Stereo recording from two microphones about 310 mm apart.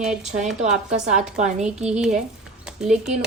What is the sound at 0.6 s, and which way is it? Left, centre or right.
A woman's voice, right.